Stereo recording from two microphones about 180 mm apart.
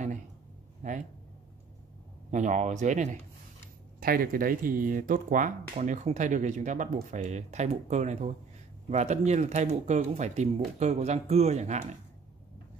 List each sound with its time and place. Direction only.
0.8 s speech: 45° right (ahead or behind)
2.3 s speech: 40° right (ahead or behind)
4.0 s speech: 55° right (ahead or behind)